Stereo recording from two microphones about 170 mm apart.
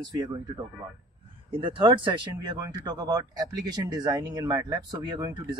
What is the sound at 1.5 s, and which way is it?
Speech, 30° right (ahead or behind).